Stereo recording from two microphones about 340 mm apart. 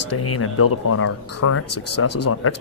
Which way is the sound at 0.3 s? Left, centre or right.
Left.